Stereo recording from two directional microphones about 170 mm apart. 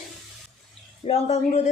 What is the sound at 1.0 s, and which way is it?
Speech, 40° left (ahead or behind).